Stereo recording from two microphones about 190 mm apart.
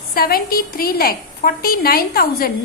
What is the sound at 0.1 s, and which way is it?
A woman's voice, 50° left (ahead or behind).